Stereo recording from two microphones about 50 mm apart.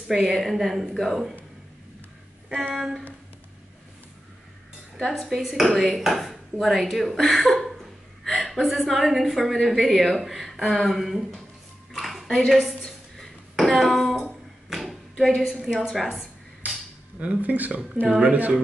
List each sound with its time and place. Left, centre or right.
0.1 s a woman's voice: centre
2.7 s a woman's voice: centre
4.9 s a woman's voice: centre
11.9 s a sound: centre
15.8 s a woman's voice: centre
17.4 s speech: right